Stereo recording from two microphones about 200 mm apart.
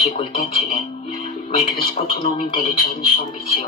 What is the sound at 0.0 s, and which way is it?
Music, 30° left (ahead or behind).